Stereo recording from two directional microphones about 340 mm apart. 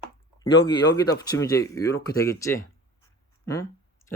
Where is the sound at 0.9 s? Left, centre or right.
Centre.